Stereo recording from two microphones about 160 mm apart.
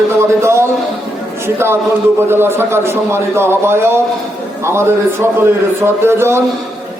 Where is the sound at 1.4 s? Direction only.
15° right (ahead or behind).